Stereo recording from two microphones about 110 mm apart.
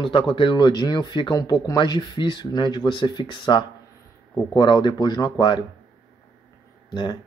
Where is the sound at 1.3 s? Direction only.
30° left (ahead or behind).